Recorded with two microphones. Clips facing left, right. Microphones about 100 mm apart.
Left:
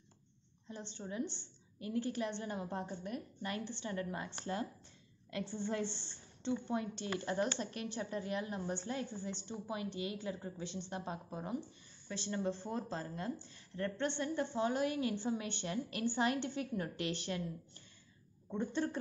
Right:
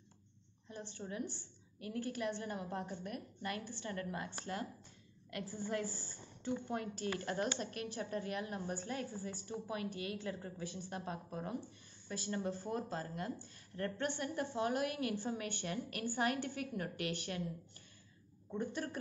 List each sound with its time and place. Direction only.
0.7 s a woman's voice: 25° left (ahead or behind)
5.5 s a woman's voice: 25° left (ahead or behind)
18.5 s a woman's voice: 25° left (ahead or behind)